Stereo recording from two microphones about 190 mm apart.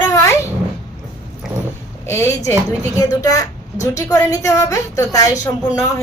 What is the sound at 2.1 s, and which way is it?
A woman's voice, 15° left (ahead or behind).